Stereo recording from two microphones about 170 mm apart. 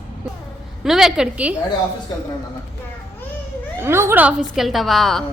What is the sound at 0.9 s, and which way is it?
Speech, 5° right (ahead or behind).